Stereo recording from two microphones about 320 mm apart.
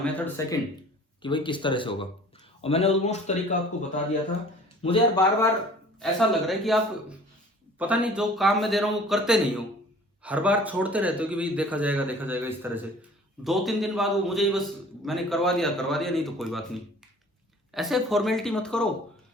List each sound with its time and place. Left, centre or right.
0.0 s a man's voice: centre
6.0 s speech: centre